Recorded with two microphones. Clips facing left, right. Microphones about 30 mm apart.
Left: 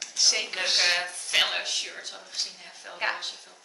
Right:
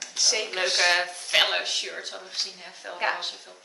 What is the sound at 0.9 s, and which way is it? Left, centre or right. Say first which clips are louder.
Speech: right 3 dB; centre.